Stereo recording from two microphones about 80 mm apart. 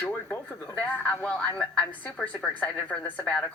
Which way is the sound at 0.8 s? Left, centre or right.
Centre.